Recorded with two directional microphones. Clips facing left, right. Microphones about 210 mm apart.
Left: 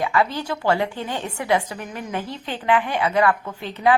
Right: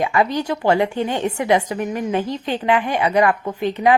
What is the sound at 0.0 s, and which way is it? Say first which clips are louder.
A woman's voice: right 3 dB; 20° right (ahead or behind).